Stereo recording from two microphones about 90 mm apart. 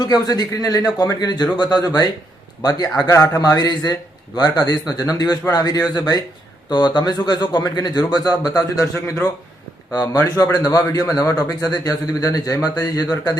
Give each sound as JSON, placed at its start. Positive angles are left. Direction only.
{"t": 0.0, "sound": "speech", "side_deg": 50}
{"t": 3.1, "sound": "a man's voice", "side_deg": 35}
{"t": 9.9, "sound": "speech", "side_deg": 40}